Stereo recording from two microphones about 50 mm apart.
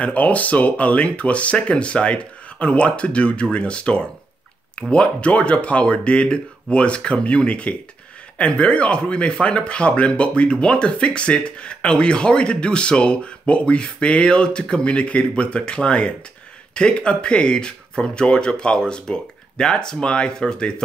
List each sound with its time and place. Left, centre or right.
0.0 s speech: left